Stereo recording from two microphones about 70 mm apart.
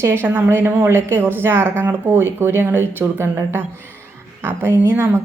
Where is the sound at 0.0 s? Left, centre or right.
Right.